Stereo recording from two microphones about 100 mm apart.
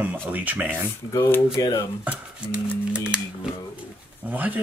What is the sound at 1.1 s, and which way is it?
Speech, 30° left (ahead or behind).